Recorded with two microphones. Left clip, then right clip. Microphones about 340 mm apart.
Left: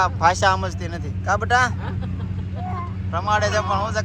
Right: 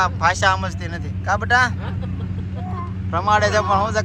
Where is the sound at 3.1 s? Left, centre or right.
Centre.